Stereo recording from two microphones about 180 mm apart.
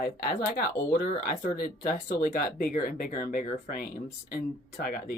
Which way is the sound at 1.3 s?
50° left (ahead or behind).